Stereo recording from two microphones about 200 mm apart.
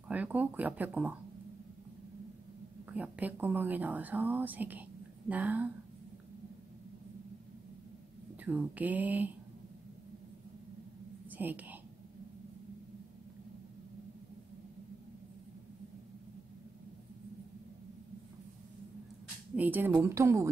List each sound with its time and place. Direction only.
0.1 s speech: 10° right (ahead or behind)
2.9 s speech: 10° right (ahead or behind)
8.5 s speech: 10° right (ahead or behind)
11.2 s whispering: 10° right (ahead or behind)
19.5 s speech: 10° right (ahead or behind)